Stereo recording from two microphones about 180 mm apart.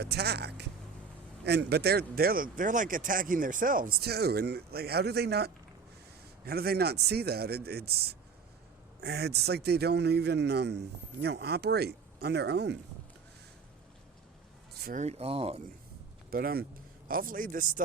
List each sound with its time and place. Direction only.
0.0 s speech: 65° right (ahead or behind)
14.9 s speech: 35° right (ahead or behind)
16.3 s speech: 55° right (ahead or behind)